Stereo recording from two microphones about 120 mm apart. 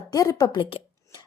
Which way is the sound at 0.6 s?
50° left (ahead or behind).